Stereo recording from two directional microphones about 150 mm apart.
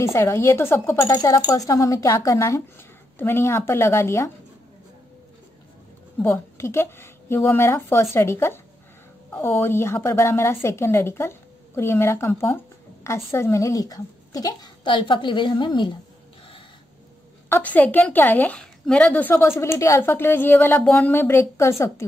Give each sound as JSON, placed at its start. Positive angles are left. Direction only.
{"t": 0.0, "sound": "a woman's voice", "side_deg": 15}
{"t": 6.2, "sound": "a woman's voice", "side_deg": 15}
{"t": 17.5, "sound": "a woman's voice", "side_deg": 10}